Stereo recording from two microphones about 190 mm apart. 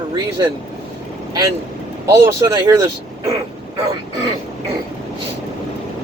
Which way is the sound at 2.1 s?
15° right (ahead or behind).